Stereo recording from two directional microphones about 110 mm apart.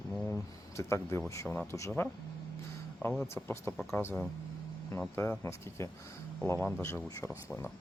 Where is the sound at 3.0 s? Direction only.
20° left (ahead or behind).